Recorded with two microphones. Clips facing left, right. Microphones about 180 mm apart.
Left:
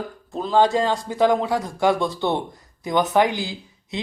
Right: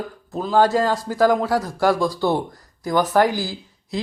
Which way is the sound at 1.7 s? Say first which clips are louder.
Even; 20° left (ahead or behind).